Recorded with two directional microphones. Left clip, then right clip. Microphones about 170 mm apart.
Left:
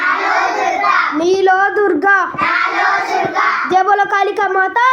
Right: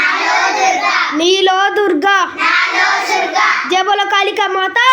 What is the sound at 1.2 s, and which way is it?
A child's voice, 15° right (ahead or behind).